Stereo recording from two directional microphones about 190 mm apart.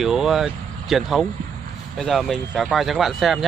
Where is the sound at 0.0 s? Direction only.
Centre (ahead or behind).